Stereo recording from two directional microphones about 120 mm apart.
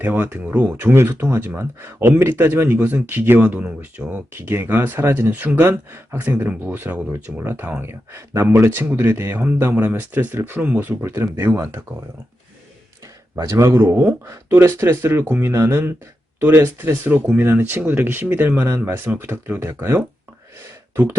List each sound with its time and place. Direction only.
0.0 s speech: 15° right (ahead or behind)
13.3 s speech: 25° right (ahead or behind)